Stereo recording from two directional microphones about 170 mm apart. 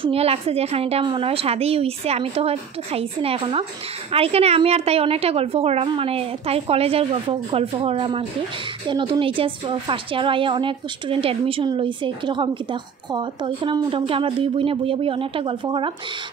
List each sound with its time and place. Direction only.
0.0 s a woman's voice: 35° right (ahead or behind)